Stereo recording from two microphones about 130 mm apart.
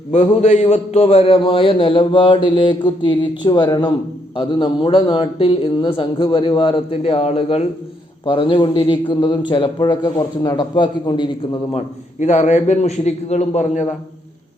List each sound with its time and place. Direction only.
0.1 s a man's voice: 60° left (ahead or behind)
8.2 s a man's voice: 40° left (ahead or behind)
12.2 s a man's voice: 65° left (ahead or behind)